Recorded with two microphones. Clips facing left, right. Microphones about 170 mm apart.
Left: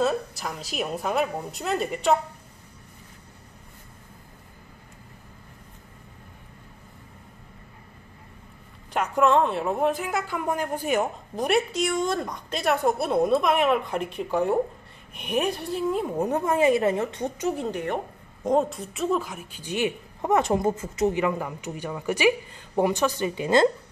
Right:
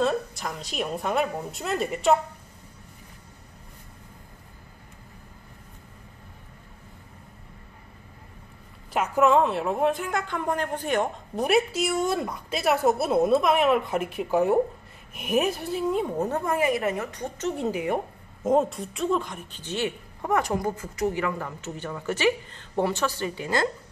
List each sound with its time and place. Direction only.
0.0 s a woman's voice: centre (ahead or behind)
8.9 s a woman's voice: 5° right (ahead or behind)
16.2 s a woman's voice: 15° left (ahead or behind)
17.4 s a woman's voice: 5° left (ahead or behind)
17.6 s a woman's voice: 10° right (ahead or behind); by 23.7 s 20° left (ahead or behind)